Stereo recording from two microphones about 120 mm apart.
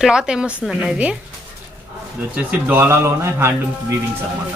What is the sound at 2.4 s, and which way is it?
Speech, 15° right (ahead or behind).